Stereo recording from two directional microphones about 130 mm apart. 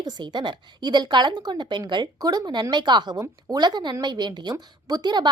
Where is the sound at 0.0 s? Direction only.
35° right (ahead or behind).